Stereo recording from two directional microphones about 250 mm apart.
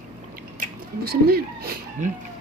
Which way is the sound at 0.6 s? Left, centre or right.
Right.